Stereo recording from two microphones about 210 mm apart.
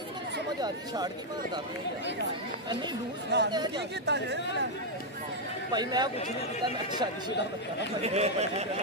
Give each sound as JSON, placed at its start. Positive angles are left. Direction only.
{"t": 0.6, "sound": "speech", "side_deg": -20}
{"t": 3.3, "sound": "speech", "side_deg": -55}
{"t": 5.7, "sound": "speech", "side_deg": -20}